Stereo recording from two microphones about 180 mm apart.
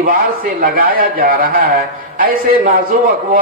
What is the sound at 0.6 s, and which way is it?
A man's voice, 55° right (ahead or behind).